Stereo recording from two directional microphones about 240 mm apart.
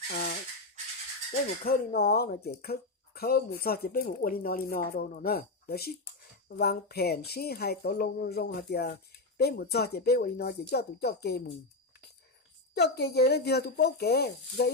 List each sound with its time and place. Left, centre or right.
0.1 s a sound: left
1.6 s speech: left
12.7 s speech: left